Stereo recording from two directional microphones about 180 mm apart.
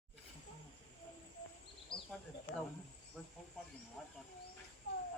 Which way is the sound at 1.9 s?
25° left (ahead or behind).